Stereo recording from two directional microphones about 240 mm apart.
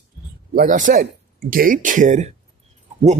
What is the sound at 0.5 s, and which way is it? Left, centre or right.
Speech, right.